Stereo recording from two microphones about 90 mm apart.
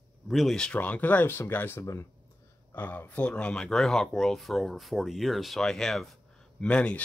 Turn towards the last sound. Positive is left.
turn(degrees=15)  # may be behind; listen again after turning